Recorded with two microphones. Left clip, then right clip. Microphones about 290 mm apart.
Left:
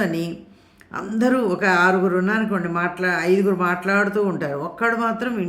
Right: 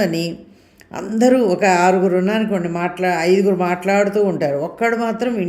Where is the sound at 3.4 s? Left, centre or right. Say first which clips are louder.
Right 3 dB; centre.